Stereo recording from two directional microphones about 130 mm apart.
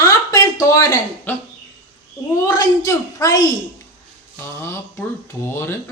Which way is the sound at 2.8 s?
25° left (ahead or behind).